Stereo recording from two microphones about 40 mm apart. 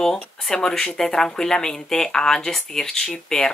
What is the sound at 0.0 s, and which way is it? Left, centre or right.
Speech, centre.